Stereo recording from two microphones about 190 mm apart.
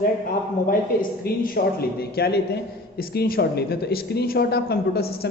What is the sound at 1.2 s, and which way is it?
Speech, 50° left (ahead or behind).